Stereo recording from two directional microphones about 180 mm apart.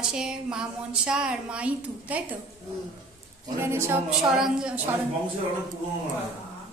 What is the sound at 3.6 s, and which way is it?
A woman's voice, 15° right (ahead or behind).